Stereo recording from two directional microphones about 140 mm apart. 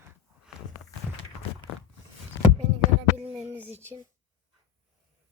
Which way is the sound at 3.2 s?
10° right (ahead or behind).